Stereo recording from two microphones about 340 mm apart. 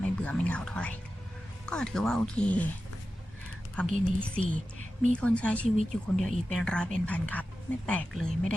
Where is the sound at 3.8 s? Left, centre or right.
Centre.